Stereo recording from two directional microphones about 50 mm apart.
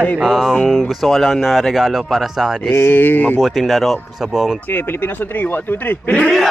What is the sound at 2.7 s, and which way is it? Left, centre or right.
Mantra, left.